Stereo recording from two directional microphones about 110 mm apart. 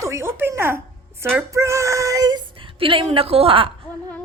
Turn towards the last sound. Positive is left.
turn(degrees=-55)  # may be behind; listen again after turning